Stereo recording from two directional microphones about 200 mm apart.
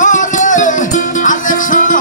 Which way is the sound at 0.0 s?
40° left (ahead or behind).